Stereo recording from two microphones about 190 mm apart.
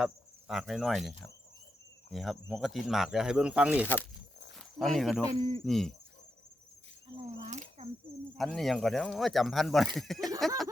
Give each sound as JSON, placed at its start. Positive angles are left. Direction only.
{"t": 0.0, "sound": "cricket", "side_deg": 0}
{"t": 2.1, "sound": "speech", "side_deg": 0}
{"t": 5.3, "sound": "speech", "side_deg": -30}
{"t": 5.6, "sound": "speech", "side_deg": 0}
{"t": 7.3, "sound": "a sound", "side_deg": -35}
{"t": 8.4, "sound": "speech", "side_deg": 0}